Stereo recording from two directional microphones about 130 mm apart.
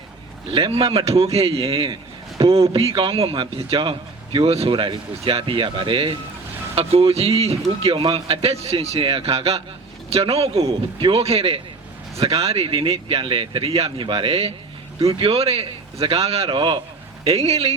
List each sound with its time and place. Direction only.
0.5 s a man's voice: 50° right (ahead or behind)
16.5 s a man's voice: 40° right (ahead or behind)
17.2 s a man's voice: 50° right (ahead or behind)